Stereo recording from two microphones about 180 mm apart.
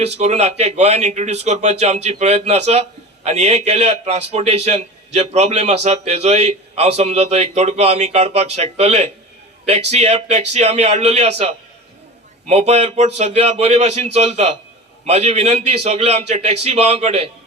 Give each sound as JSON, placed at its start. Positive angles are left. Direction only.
{"t": 0.0, "sound": "a man's voice", "side_deg": -35}